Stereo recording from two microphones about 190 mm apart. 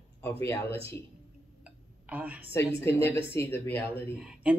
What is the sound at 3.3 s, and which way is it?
Speech, 10° left (ahead or behind).